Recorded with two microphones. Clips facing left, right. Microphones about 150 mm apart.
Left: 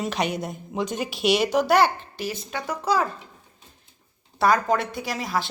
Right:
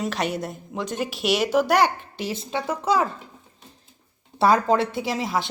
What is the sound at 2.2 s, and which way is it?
Speech, 25° right (ahead or behind).